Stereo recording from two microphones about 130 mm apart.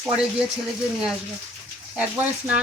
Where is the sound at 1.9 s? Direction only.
10° right (ahead or behind).